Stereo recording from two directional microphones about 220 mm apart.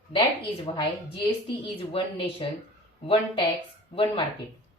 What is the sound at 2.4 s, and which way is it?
Speech, 20° left (ahead or behind).